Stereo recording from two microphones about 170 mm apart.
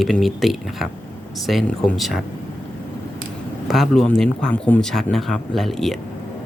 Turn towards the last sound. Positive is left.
turn(degrees=0)  # may be behind; listen again after turning